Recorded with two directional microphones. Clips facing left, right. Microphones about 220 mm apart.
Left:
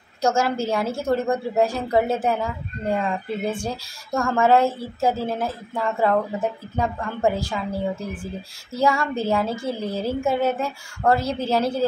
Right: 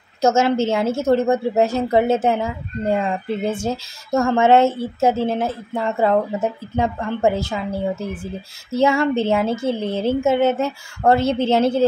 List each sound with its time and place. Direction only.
0.2 s a woman's voice: 25° right (ahead or behind)
8.7 s a woman's voice: 25° right (ahead or behind)